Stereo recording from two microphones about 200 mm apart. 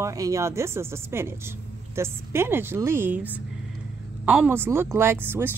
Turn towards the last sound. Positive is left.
turn(degrees=-10)  # may be behind; listen again after turning